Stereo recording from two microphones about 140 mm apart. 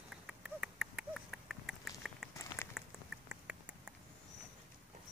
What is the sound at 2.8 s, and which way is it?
Rodents, 5° right (ahead or behind).